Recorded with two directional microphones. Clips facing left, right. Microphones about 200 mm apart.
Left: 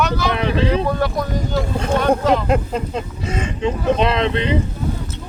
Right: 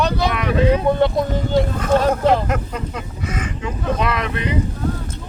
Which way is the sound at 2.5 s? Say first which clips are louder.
Left 5 dB; 30° left (ahead or behind).